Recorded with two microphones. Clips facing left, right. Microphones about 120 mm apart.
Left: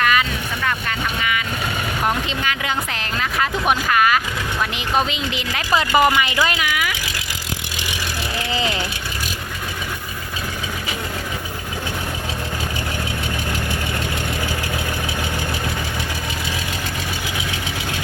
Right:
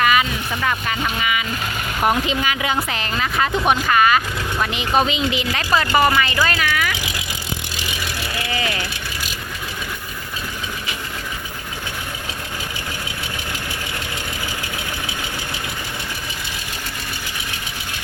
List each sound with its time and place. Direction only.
0.0 s speech: 5° right (ahead or behind)
5.7 s speech: 20° left (ahead or behind)
8.5 s vehicle: 25° left (ahead or behind)